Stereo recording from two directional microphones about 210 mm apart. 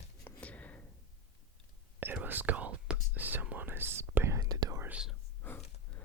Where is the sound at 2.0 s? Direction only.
10° right (ahead or behind).